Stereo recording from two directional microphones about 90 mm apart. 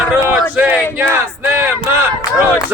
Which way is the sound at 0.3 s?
20° right (ahead or behind).